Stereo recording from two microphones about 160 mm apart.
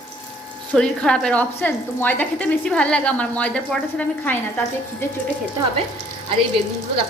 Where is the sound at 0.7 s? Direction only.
5° left (ahead or behind).